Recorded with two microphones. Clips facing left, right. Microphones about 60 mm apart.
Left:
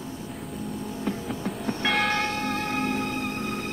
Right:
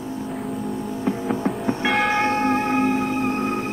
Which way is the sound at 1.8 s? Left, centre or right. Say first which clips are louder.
Right 4 dB; centre.